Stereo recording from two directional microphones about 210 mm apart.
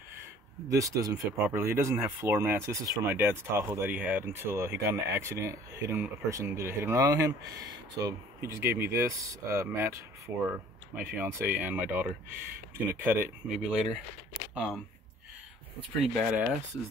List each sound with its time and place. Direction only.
0.7 s speech: 15° right (ahead or behind)
16.1 s speech: centre (ahead or behind)